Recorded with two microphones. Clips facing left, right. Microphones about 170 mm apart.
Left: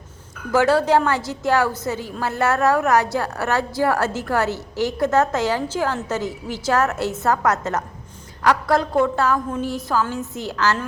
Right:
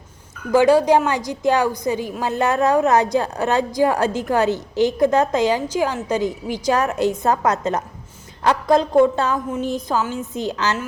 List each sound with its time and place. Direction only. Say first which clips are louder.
0.5 s a woman's voice: right 3 dB; 15° right (ahead or behind)